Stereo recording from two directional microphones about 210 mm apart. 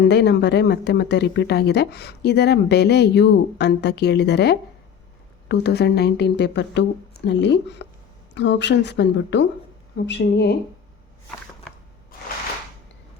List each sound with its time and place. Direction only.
0.0 s speech: 55° left (ahead or behind)